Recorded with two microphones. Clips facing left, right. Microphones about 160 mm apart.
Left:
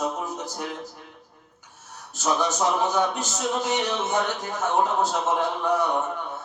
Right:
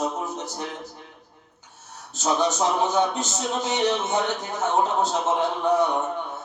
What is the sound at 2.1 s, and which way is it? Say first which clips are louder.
Mantra: right 2 dB; 20° right (ahead or behind).